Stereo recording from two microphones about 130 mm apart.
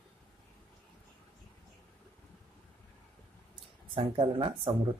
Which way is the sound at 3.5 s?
40° right (ahead or behind).